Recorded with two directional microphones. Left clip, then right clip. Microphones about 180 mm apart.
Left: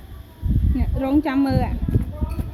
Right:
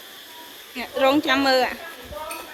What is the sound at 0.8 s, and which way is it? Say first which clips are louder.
Speech: right 3 dB; centre (ahead or behind).